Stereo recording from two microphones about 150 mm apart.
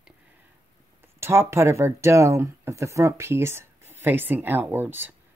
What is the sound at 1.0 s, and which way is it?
Speech, 15° right (ahead or behind).